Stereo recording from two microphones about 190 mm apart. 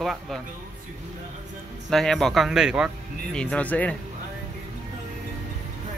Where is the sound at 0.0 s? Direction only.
Centre (ahead or behind).